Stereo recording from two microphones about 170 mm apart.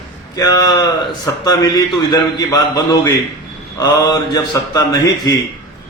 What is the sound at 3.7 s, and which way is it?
A man's voice, 20° left (ahead or behind).